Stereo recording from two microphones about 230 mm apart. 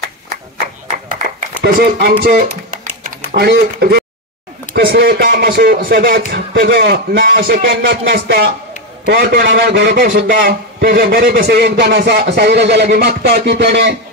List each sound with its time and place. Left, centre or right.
1.6 s a man's voice: right